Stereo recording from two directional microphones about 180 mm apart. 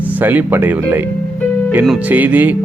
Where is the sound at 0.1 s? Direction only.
10° right (ahead or behind).